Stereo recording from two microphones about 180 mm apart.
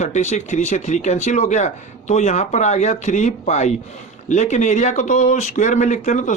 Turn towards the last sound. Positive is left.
turn(degrees=40)  # may be behind; listen again after turning